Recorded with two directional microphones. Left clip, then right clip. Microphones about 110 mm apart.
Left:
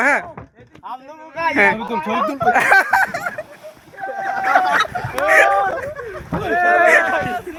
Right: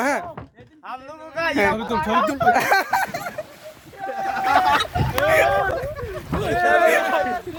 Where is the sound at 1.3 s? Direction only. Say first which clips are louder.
Left 5 dB; 5° right (ahead or behind).